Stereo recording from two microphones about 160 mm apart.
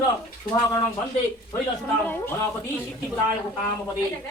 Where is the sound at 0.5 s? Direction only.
20° left (ahead or behind).